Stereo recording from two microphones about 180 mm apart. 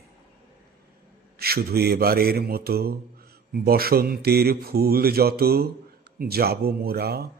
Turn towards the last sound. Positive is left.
turn(degrees=-60)  # may be behind; listen again after turning